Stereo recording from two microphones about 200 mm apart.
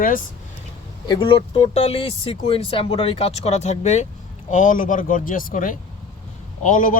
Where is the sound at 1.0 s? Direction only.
25° left (ahead or behind).